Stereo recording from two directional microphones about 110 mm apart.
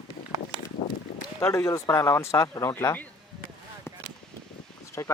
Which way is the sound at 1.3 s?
25° left (ahead or behind).